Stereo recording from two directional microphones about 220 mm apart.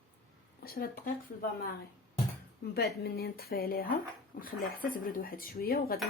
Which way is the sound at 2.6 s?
45° left (ahead or behind).